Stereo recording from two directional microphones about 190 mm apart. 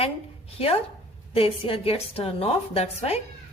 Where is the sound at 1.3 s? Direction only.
30° left (ahead or behind).